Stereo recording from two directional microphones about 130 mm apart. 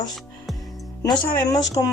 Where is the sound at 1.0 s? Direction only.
25° left (ahead or behind).